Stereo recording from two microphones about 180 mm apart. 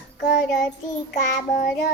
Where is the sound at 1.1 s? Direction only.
45° left (ahead or behind).